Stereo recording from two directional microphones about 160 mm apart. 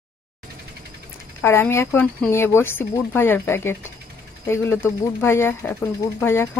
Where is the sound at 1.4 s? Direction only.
15° left (ahead or behind).